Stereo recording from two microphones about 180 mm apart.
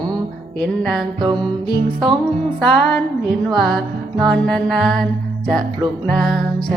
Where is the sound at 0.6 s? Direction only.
Centre (ahead or behind).